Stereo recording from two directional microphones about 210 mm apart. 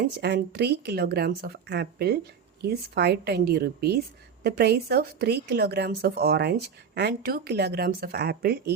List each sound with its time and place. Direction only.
0.0 s a woman's voice: 50° right (ahead or behind)